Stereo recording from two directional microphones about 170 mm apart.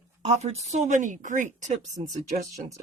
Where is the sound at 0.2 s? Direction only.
40° right (ahead or behind).